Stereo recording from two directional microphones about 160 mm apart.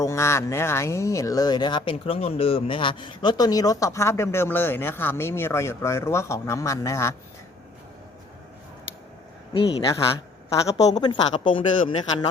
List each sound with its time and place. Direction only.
0.0 s speech: 15° left (ahead or behind)
9.5 s a woman's voice: 25° left (ahead or behind)